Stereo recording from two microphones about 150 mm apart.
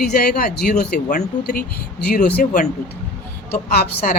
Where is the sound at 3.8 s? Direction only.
90° left.